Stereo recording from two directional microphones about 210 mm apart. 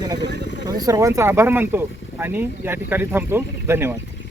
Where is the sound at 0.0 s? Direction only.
15° right (ahead or behind).